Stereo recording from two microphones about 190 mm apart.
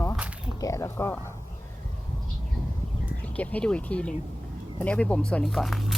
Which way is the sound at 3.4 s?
5° left (ahead or behind).